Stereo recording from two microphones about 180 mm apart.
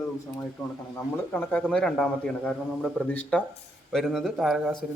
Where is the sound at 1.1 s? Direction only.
10° left (ahead or behind).